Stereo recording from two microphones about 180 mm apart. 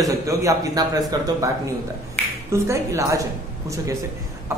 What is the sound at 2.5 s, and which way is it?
Speech, 15° right (ahead or behind).